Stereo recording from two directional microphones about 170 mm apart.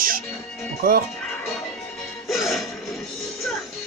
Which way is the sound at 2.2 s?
Centre (ahead or behind).